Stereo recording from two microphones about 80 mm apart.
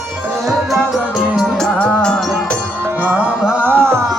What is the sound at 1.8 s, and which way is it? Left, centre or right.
Music, centre.